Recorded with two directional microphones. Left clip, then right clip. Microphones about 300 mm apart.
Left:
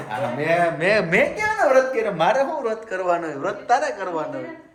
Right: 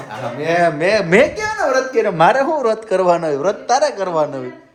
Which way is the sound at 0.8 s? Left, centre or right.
Centre.